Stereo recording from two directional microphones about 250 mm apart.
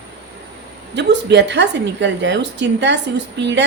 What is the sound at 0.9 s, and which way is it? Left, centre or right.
A woman's voice, right.